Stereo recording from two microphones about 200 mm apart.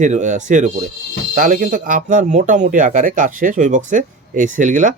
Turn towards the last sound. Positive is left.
turn(degrees=-40)  # may be behind; listen again after turning